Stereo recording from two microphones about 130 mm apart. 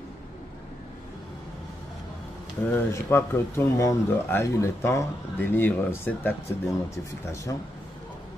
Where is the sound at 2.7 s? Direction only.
20° left (ahead or behind).